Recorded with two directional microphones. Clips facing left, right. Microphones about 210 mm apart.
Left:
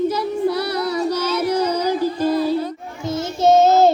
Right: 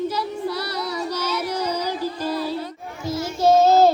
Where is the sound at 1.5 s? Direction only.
55° left (ahead or behind).